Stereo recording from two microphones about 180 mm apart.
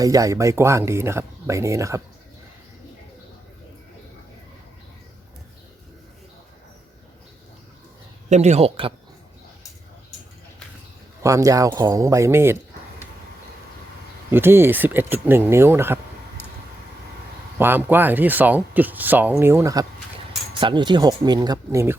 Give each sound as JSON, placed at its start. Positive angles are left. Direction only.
{"t": 0.0, "sound": "speech", "side_deg": -20}
{"t": 8.3, "sound": "speech", "side_deg": -40}
{"t": 11.2, "sound": "speech", "side_deg": -20}
{"t": 14.3, "sound": "speech", "side_deg": -10}
{"t": 17.6, "sound": "speech", "side_deg": -10}
{"t": 20.5, "sound": "speech", "side_deg": -25}